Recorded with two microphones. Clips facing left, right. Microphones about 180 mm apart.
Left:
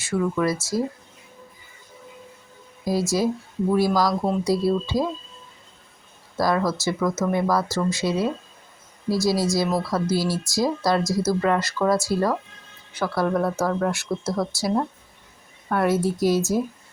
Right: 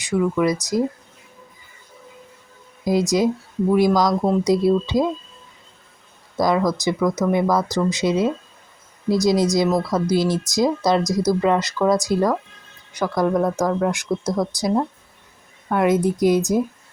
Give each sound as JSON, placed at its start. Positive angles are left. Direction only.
{"t": 0.0, "sound": "speech", "side_deg": -15}
{"t": 2.8, "sound": "speech", "side_deg": -20}
{"t": 6.3, "sound": "speech", "side_deg": -20}